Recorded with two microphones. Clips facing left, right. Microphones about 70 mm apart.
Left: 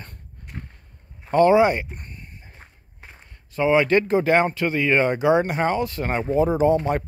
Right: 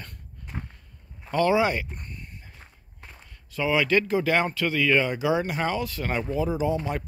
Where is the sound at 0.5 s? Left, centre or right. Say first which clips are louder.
Right 1 dB; centre.